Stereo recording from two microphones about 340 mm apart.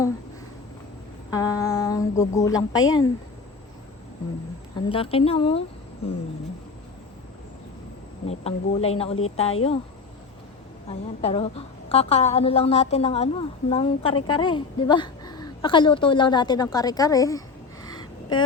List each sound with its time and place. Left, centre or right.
1.3 s a woman's voice: centre
4.9 s a woman's voice: centre
8.3 s a woman's voice: centre
10.8 s a woman's voice: centre
17.8 s a sound: centre